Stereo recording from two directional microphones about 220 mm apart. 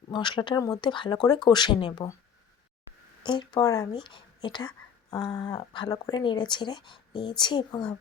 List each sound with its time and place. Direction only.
0.1 s speech: 20° left (ahead or behind)
3.2 s speech: 20° left (ahead or behind)